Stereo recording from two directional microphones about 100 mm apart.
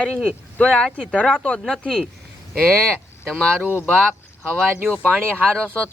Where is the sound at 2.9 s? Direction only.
15° right (ahead or behind).